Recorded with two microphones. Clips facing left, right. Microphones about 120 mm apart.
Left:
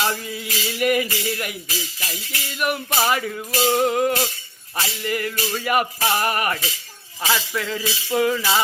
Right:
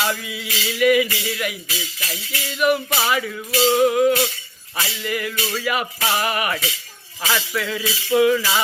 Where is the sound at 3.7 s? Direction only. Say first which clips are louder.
Right 4 dB; 50° left (ahead or behind).